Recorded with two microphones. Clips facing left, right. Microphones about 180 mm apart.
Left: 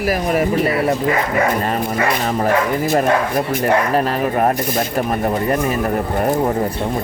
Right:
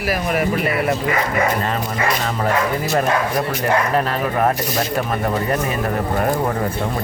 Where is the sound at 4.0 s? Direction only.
35° left (ahead or behind).